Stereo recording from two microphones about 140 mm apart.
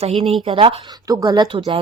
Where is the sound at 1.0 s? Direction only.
25° right (ahead or behind).